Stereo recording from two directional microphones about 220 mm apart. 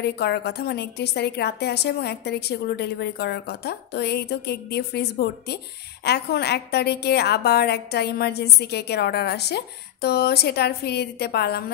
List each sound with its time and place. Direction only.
0.0 s a woman's voice: 50° left (ahead or behind)